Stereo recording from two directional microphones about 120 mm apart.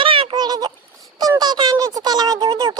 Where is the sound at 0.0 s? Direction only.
45° right (ahead or behind).